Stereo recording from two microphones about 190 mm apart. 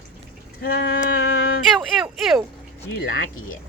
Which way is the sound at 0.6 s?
55° left (ahead or behind).